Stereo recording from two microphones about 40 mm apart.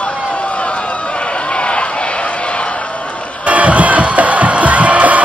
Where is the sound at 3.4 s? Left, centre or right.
Right.